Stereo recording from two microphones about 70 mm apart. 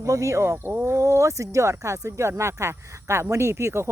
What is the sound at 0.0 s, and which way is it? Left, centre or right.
Speech, right.